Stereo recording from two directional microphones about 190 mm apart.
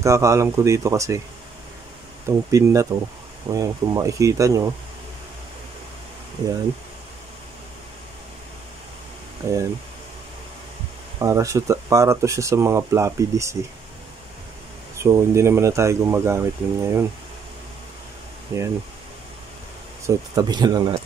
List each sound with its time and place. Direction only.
0.0 s speech: 15° right (ahead or behind)
2.2 s speech: 15° right (ahead or behind)
9.4 s speech: 15° right (ahead or behind)
11.1 s speech: 15° right (ahead or behind)
15.0 s speech: 15° right (ahead or behind)
18.5 s speech: 15° right (ahead or behind)
20.1 s speech: 20° right (ahead or behind)